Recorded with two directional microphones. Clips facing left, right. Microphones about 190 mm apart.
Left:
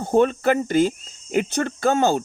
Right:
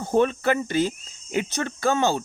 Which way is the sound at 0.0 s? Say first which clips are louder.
Left 3 dB; 50° left (ahead or behind).